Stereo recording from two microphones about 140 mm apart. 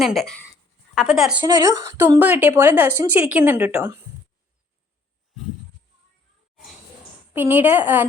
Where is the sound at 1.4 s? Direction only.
25° right (ahead or behind).